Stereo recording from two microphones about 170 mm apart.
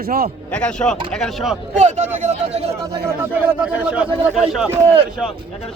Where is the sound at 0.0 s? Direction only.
65° right (ahead or behind).